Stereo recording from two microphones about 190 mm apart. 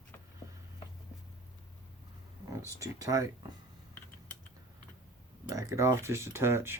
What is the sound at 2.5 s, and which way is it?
Speech, 15° right (ahead or behind).